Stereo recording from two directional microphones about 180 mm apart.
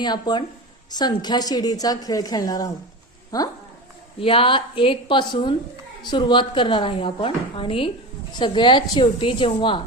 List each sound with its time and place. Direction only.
0.0 s a woman's voice: 25° left (ahead or behind)